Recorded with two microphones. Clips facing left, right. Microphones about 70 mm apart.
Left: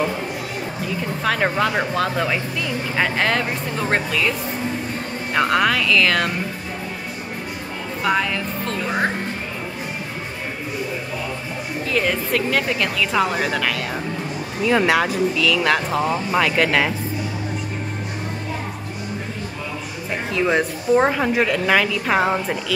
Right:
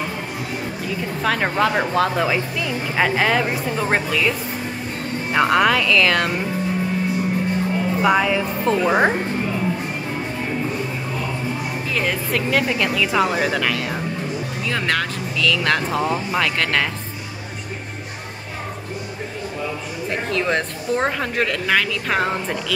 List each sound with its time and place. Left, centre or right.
0.8 s speech: centre
8.0 s speech: centre
8.7 s speech: right
11.9 s speech: centre
14.7 s speech: centre
20.2 s speech: centre